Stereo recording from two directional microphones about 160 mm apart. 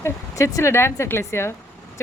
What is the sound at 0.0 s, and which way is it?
Speech, 20° left (ahead or behind).